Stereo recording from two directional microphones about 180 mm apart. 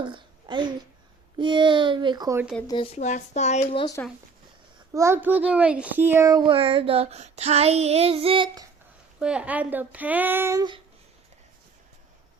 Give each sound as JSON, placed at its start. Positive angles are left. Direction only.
{"t": 0.0, "sound": "a sound", "side_deg": -25}
{"t": 1.4, "sound": "a child's voice", "side_deg": -25}
{"t": 2.6, "sound": "speech", "side_deg": 30}
{"t": 4.9, "sound": "a child's voice", "side_deg": -15}
{"t": 9.1, "sound": "speech", "side_deg": -5}